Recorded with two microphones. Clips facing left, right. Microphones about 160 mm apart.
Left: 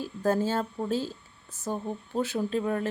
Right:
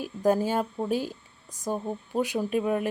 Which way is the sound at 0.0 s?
15° right (ahead or behind).